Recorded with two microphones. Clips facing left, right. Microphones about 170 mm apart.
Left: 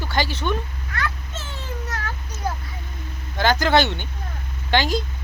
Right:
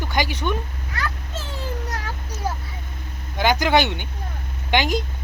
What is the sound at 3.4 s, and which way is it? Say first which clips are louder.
Speech: even; 15° right (ahead or behind).